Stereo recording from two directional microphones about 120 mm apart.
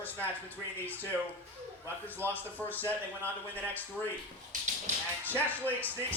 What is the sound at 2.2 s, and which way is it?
Speech, 20° right (ahead or behind).